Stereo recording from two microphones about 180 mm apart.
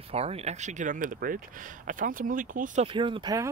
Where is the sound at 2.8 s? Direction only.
30° right (ahead or behind).